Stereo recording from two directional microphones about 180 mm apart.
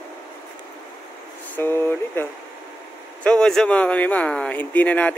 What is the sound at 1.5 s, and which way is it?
Speech, 10° left (ahead or behind).